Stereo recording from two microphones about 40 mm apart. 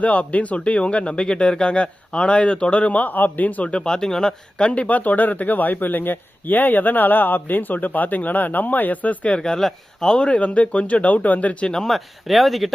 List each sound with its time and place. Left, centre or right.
0.0 s speech: left
3.8 s speech: centre
4.6 s speech: left
9.4 s speech: centre
10.2 s speech: left
11.9 s speech: centre